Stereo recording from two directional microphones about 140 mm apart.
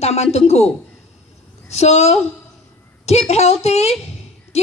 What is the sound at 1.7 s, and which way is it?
A child's voice, 50° left (ahead or behind).